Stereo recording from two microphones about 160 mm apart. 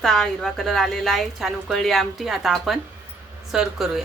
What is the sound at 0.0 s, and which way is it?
A woman's voice, 5° left (ahead or behind).